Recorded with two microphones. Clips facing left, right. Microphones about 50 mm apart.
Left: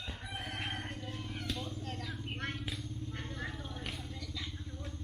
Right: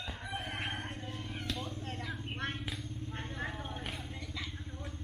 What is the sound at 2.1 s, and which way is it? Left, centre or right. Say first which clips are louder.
Vehicle: right 1 dB; centre.